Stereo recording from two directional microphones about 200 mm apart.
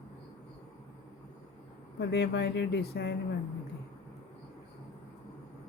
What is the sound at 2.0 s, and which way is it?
Speech, 55° left (ahead or behind).